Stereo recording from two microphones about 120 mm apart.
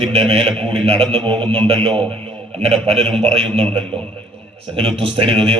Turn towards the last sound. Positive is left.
turn(degrees=-50)  # may be behind; listen again after turning